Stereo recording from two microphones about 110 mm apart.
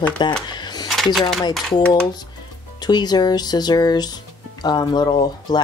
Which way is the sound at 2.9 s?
40° left (ahead or behind).